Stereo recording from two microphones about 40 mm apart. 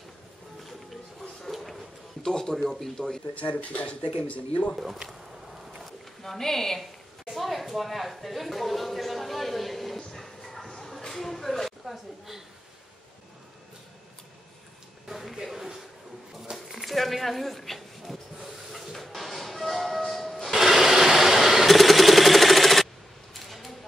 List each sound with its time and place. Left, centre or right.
1.5 s dog: centre
2.2 s speech: centre
3.3 s speech: left
5.9 s a sound: centre
7.3 s speech: centre
10.1 s dog: centre
11.8 s a woman's voice: centre
15.0 s a sound: centre
20.5 s sewing machine: centre
23.3 s a sound: centre